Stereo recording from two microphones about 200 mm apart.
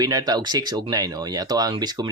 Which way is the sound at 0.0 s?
20° right (ahead or behind).